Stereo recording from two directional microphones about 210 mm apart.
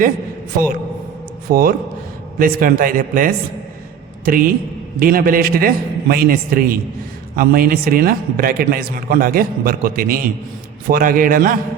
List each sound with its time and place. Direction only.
1.5 s a man's voice: 45° right (ahead or behind)